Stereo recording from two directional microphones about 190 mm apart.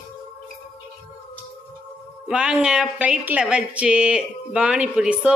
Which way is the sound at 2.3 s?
5° right (ahead or behind).